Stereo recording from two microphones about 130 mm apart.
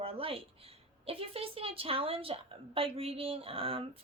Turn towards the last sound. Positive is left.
turn(degrees=-45)  # may be behind; listen again after turning